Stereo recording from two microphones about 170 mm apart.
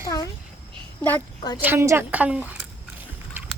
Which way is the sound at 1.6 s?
15° right (ahead or behind).